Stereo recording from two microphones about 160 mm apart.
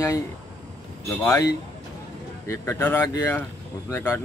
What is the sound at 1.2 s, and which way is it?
Speech, 20° left (ahead or behind).